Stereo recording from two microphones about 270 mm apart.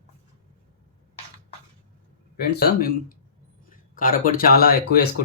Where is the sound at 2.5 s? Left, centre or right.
Left.